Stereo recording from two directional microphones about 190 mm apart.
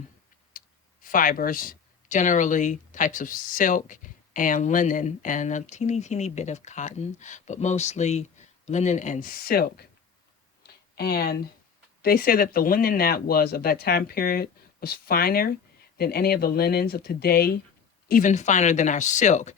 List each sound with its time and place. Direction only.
0.5 s clicking: 45° left (ahead or behind)
1.0 s speech: 45° left (ahead or behind)
10.6 s a sound: 55° left (ahead or behind)
12.0 s speech: 50° left (ahead or behind)
18.1 s speech: 40° left (ahead or behind)